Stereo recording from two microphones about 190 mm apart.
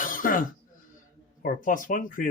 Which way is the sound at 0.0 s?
45° left (ahead or behind).